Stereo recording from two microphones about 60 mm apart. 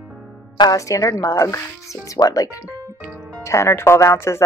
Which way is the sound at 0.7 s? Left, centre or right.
Left.